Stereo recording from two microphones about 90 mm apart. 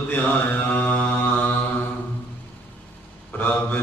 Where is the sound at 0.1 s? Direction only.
20° left (ahead or behind).